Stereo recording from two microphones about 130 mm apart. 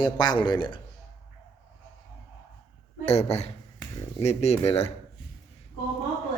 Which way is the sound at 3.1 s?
55° left (ahead or behind).